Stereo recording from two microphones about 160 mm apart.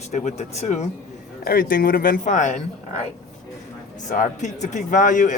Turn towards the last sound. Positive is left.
turn(degrees=50)  # may be behind; listen again after turning